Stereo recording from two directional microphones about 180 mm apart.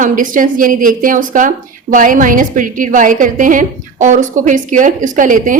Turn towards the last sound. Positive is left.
turn(degrees=-45)  # may be behind; listen again after turning